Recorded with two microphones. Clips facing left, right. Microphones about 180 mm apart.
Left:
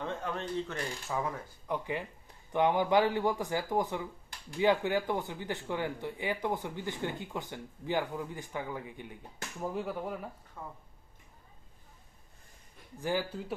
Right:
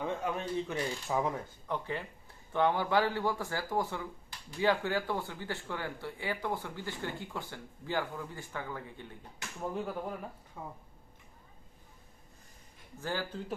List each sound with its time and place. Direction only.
0.0 s speech: 10° right (ahead or behind)
1.6 s speech: 15° left (ahead or behind)
9.6 s speech: 5° left (ahead or behind)
10.6 s speech: 10° right (ahead or behind)
13.0 s speech: 15° left (ahead or behind)